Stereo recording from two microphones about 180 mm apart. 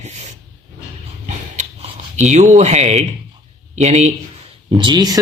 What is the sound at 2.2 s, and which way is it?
Speech, 40° right (ahead or behind).